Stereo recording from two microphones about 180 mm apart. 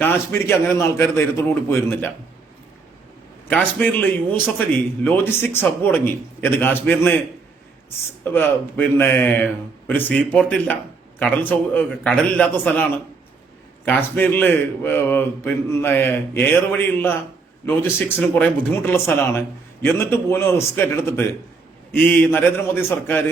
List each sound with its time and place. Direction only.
0.0 s a man's voice: 10° left (ahead or behind)
3.5 s a man's voice: 10° left (ahead or behind)
8.2 s a man's voice: 10° left (ahead or behind)